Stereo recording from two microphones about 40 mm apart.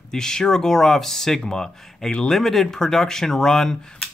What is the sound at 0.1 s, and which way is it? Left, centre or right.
Speech, centre.